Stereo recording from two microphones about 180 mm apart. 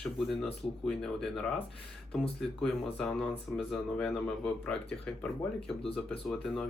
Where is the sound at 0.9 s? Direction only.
5° left (ahead or behind).